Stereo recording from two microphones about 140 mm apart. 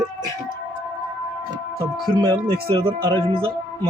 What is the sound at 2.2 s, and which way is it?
Speech, 40° right (ahead or behind).